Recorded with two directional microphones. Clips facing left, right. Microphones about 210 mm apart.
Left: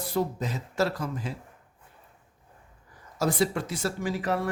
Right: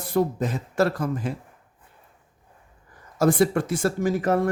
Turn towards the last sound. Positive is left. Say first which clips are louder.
# right 7 dB
turn(degrees=-45)  # may be behind; listen again after turning